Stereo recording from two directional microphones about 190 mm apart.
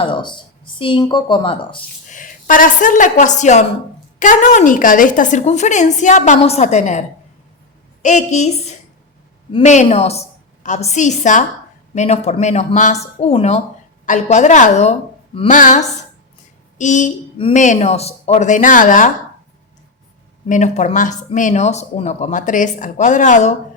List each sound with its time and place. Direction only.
0.0 s speech: 25° left (ahead or behind)
2.0 s a woman's voice: 45° left (ahead or behind)
8.0 s a woman's voice: 40° left (ahead or behind)
17.3 s a woman's voice: 30° left (ahead or behind); by 19.1 s 45° left (ahead or behind)
20.5 s a woman's voice: 40° left (ahead or behind)